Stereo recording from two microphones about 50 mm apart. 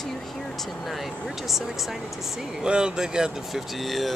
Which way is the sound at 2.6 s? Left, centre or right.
Centre.